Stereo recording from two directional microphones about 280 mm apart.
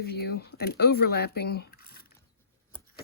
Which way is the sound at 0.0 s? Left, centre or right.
Left.